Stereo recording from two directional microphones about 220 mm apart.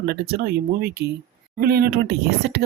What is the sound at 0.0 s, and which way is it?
Speech, 45° right (ahead or behind).